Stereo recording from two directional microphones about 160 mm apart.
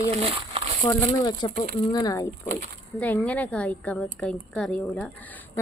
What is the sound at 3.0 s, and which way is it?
Speech, 10° left (ahead or behind).